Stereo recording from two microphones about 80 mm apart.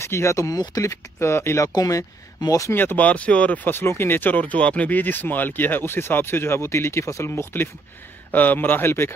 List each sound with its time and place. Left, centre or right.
0.0 s speech: left
1.7 s speech: left
2.7 s speech: left